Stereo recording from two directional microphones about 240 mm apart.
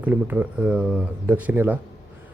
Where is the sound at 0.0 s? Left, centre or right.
Centre.